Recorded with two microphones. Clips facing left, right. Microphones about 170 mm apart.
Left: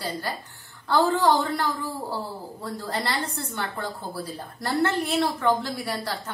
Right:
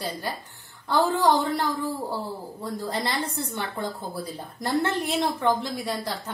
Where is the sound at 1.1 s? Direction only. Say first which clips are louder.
Even; 20° right (ahead or behind).